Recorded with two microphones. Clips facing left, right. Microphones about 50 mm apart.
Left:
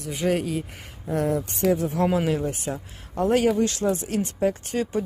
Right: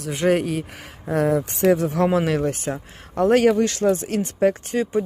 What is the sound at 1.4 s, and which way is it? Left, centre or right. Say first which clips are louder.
Speech: right 4 dB; right.